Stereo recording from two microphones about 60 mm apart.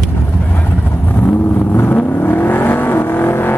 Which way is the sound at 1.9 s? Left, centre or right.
Left.